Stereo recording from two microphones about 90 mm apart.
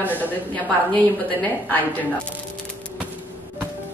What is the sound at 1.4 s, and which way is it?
Speech, 15° left (ahead or behind).